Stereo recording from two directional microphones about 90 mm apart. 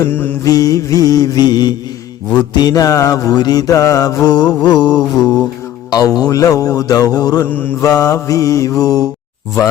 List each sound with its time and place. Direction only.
0.1 s mantra: 25° left (ahead or behind)
0.4 s mantra: 40° left (ahead or behind)
7.4 s mantra: 20° left (ahead or behind)
7.8 s mantra: 40° left (ahead or behind)